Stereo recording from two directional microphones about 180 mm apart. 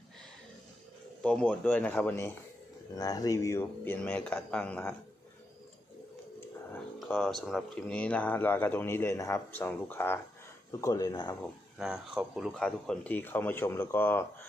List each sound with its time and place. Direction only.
1.2 s speech: 5° left (ahead or behind)
7.1 s speech: 5° left (ahead or behind); by 11.3 s 20° left (ahead or behind)
11.8 s speech: 5° right (ahead or behind); by 14.2 s 10° left (ahead or behind)